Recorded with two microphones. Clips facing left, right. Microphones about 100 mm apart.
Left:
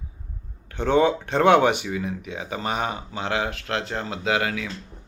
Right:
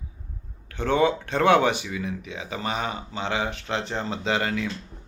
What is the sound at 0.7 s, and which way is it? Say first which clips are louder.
Speech: left 2 dB; 15° left (ahead or behind).